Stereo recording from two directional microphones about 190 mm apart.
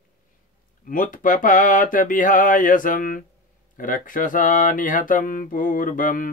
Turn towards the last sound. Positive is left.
turn(degrees=45)  # may be behind; listen again after turning